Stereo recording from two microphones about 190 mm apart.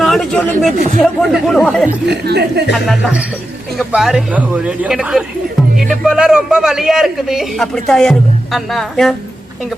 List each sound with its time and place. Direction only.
0.0 s a man's voice: centre (ahead or behind)
2.0 s speech: 60° right (ahead or behind)
2.7 s a man's voice: centre (ahead or behind)